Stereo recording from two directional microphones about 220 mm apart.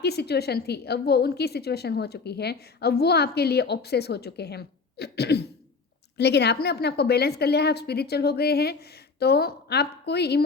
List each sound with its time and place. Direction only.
0.0 s a woman's voice: 45° left (ahead or behind)